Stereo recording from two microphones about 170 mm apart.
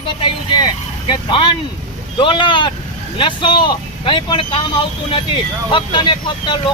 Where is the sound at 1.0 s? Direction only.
30° left (ahead or behind).